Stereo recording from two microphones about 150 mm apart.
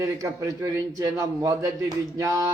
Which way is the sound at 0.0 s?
20° right (ahead or behind).